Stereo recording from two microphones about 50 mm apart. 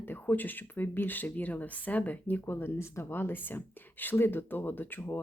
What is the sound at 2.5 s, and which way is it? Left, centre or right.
Speech, left.